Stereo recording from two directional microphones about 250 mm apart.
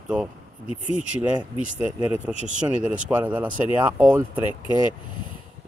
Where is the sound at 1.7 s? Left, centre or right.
Left.